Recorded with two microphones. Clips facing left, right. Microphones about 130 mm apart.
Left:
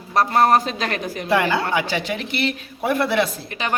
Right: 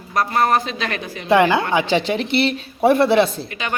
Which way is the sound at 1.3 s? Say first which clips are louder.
Right 5 dB; 25° right (ahead or behind).